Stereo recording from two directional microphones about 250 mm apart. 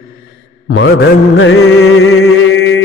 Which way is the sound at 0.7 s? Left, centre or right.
Left.